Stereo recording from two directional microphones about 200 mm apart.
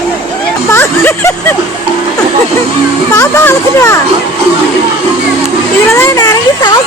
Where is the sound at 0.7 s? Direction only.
10° left (ahead or behind).